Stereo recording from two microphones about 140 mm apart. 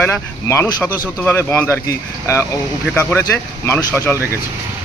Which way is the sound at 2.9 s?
20° left (ahead or behind).